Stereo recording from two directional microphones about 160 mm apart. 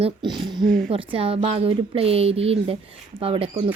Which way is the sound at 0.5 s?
5° left (ahead or behind).